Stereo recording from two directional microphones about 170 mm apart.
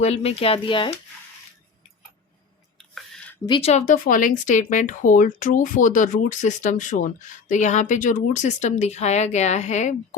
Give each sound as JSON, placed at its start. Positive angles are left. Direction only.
{"t": 0.0, "sound": "speech", "side_deg": 40}
{"t": 2.7, "sound": "a sound", "side_deg": 0}
{"t": 3.4, "sound": "speech", "side_deg": 30}